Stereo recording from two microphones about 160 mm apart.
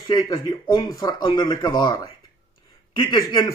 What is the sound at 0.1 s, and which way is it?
A man's voice, 30° left (ahead or behind).